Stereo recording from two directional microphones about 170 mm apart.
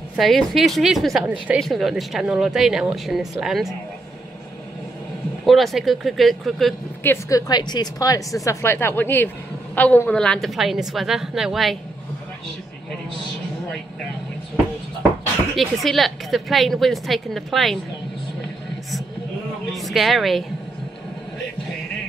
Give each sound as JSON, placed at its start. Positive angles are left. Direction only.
{"t": 0.1, "sound": "a woman's voice", "side_deg": 0}
{"t": 5.4, "sound": "a woman's voice", "side_deg": 0}
{"t": 7.0, "sound": "a woman's voice", "side_deg": 15}
{"t": 15.5, "sound": "a woman's voice", "side_deg": 0}
{"t": 19.7, "sound": "speech", "side_deg": 0}